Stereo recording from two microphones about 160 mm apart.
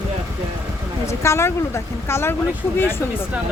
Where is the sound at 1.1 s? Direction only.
15° left (ahead or behind).